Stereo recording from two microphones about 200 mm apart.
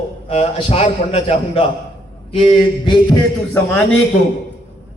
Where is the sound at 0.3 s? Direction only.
30° left (ahead or behind).